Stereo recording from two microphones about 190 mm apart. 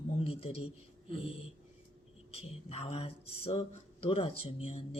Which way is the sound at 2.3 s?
30° left (ahead or behind).